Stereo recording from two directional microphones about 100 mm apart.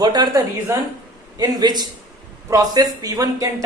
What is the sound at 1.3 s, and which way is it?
A woman's voice, 40° right (ahead or behind).